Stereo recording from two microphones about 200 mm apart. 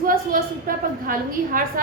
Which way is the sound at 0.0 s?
45° right (ahead or behind).